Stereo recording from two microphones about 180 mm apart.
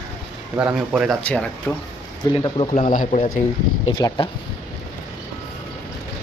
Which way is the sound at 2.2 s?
25° left (ahead or behind).